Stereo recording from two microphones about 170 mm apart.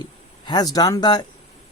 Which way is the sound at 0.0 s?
25° left (ahead or behind).